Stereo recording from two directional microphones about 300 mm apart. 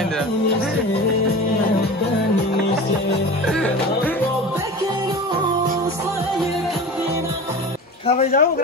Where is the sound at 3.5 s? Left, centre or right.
Centre.